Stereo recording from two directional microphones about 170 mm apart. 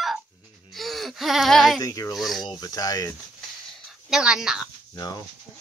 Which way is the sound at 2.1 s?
Centre (ahead or behind).